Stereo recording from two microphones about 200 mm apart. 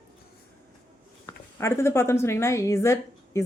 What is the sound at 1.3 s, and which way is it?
A woman's voice, 15° left (ahead or behind).